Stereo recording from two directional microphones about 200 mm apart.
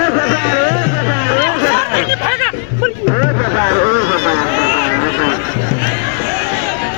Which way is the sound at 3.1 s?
45° left (ahead or behind).